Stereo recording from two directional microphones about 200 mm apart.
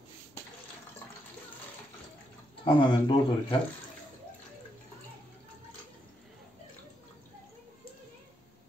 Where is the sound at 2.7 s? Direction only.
25° left (ahead or behind).